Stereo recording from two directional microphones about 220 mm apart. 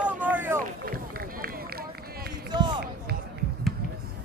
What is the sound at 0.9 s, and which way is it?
Run, 40° right (ahead or behind).